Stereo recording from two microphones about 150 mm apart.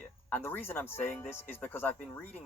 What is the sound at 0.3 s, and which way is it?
Speech, 10° left (ahead or behind).